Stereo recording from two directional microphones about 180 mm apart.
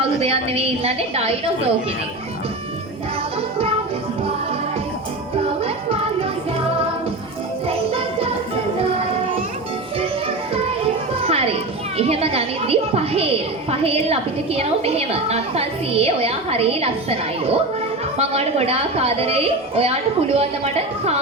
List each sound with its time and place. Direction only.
0.2 s a woman's voice: 35° right (ahead or behind)
7.7 s music: 35° right (ahead or behind)
11.2 s children playing: 35° right (ahead or behind)
11.9 s a child's voice: 35° right (ahead or behind)